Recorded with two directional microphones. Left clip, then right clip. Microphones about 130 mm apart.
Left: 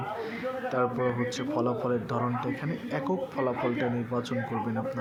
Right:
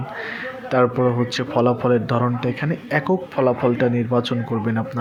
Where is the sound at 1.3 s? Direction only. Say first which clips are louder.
Right 10 dB; 25° right (ahead or behind).